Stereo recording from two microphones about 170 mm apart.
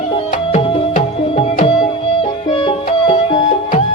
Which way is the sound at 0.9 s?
50° left (ahead or behind).